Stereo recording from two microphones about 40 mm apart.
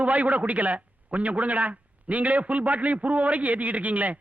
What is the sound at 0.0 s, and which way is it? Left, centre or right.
A man's voice, right.